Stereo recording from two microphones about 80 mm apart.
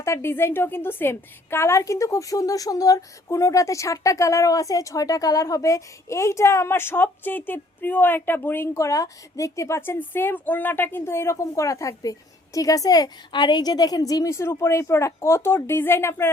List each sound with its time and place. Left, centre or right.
0.0 s a woman's voice: left
14.3 s a woman's voice: left